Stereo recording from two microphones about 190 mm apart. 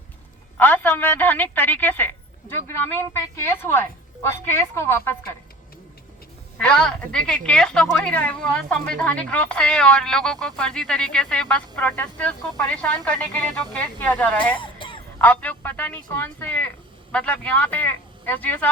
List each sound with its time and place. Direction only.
0.5 s a woman's voice: 10° left (ahead or behind)
6.6 s a man's voice: 5° left (ahead or behind)
14.5 s music: 25° left (ahead or behind)
15.2 s a man's voice: 10° left (ahead or behind)